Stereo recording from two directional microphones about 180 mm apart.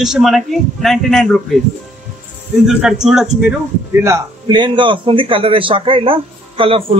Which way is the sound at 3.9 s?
15° right (ahead or behind).